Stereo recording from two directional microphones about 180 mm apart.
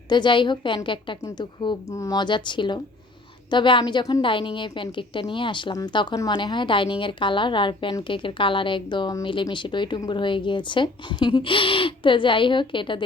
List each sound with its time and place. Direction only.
0.1 s a woman's voice: 25° left (ahead or behind)